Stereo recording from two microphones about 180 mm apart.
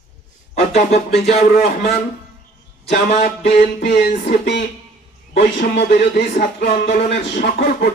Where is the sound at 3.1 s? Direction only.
40° left (ahead or behind).